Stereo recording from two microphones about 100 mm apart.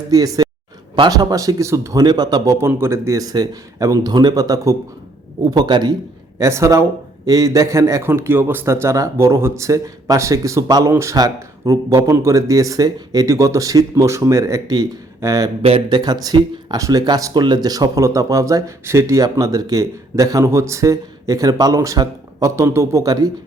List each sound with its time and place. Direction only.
0.1 s a man's voice: 40° right (ahead or behind)
6.4 s a man's voice: 30° right (ahead or behind)
15.9 s a man's voice: 45° right (ahead or behind)